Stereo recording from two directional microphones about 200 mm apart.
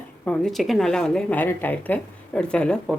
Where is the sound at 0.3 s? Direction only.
Centre (ahead or behind).